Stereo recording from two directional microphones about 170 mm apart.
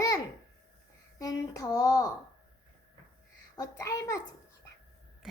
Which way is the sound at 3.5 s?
20° left (ahead or behind).